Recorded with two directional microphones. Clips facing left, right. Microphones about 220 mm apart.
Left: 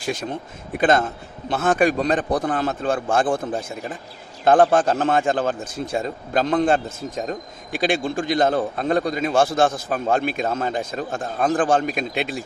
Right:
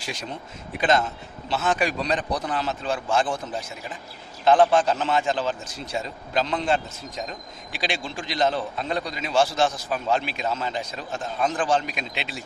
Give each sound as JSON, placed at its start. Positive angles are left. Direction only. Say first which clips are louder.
{"t": 0.0, "sound": "a man's voice", "louder": "left 7 dB", "side_deg": 50}